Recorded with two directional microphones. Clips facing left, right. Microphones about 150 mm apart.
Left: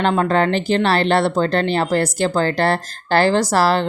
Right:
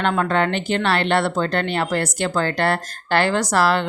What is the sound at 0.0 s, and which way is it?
Speech, 30° left (ahead or behind).